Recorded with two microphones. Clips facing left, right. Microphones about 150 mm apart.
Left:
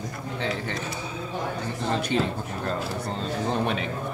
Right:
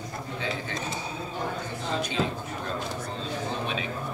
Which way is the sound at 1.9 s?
65° left (ahead or behind).